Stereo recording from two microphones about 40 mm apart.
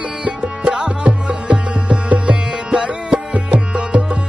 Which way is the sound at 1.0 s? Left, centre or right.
Right.